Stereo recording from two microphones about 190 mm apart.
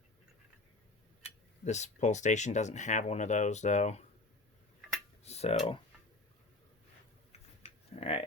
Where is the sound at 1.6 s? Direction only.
35° left (ahead or behind).